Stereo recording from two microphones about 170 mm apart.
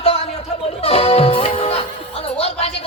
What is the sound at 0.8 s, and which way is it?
Music, 35° left (ahead or behind).